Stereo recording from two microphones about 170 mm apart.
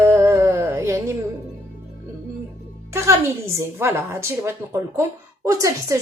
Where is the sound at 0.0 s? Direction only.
15° right (ahead or behind).